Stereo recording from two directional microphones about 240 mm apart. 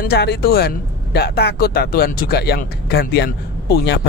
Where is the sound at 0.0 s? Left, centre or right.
Left.